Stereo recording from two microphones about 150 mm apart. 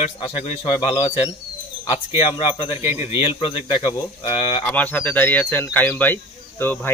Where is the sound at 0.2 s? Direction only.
40° left (ahead or behind).